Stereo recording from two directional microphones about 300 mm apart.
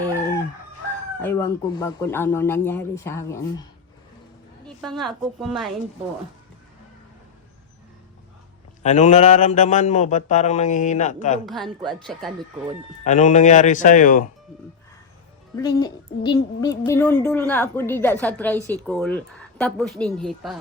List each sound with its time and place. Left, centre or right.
1.2 s a woman's voice: centre
4.8 s speech: centre
8.8 s speech: left
11.4 s speech: centre
13.1 s speech: left
15.6 s a woman's voice: centre